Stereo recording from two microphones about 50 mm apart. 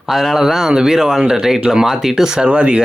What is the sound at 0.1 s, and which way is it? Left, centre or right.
Speech, centre.